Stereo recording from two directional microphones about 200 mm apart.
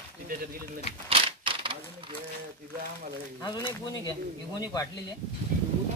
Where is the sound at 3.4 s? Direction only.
20° left (ahead or behind).